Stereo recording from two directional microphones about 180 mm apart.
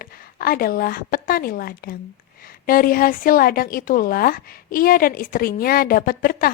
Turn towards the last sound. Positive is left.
turn(degrees=55)  # may be behind; listen again after turning